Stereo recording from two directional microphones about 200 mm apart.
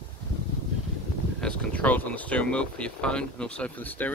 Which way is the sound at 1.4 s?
5° left (ahead or behind).